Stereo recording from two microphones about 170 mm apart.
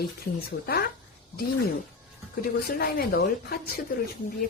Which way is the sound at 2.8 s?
65° left (ahead or behind).